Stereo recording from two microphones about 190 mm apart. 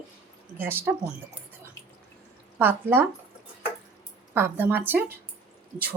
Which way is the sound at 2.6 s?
10° right (ahead or behind).